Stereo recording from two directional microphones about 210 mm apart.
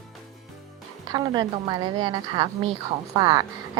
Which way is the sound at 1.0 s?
20° right (ahead or behind).